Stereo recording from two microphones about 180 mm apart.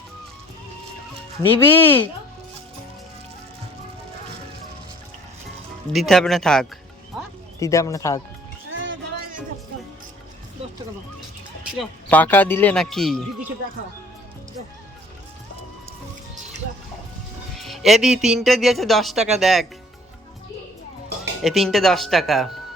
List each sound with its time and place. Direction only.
1.4 s speech: 15° left (ahead or behind)
5.9 s speech: centre (ahead or behind)
7.6 s speech: 15° left (ahead or behind)
8.7 s music: 90° right
11.8 s speech: 10° left (ahead or behind)
17.6 s speech: centre (ahead or behind)
21.4 s speech: centre (ahead or behind)